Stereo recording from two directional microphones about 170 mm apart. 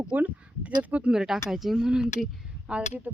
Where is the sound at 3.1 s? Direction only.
10° right (ahead or behind).